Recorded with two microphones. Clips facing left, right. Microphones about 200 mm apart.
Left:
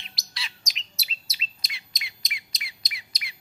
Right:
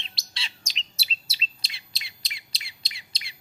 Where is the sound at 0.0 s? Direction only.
25° right (ahead or behind).